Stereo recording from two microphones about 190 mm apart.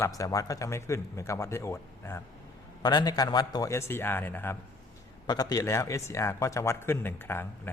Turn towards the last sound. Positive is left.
turn(degrees=10)  # may be behind; listen again after turning